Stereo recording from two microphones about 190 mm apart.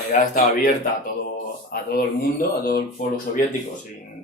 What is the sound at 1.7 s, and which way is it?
Speech, 55° left (ahead or behind).